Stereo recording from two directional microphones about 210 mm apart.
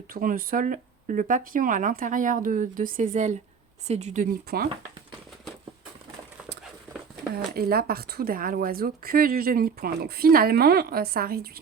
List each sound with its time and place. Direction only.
0.1 s speech: 40° right (ahead or behind)
7.3 s speech: 45° right (ahead or behind)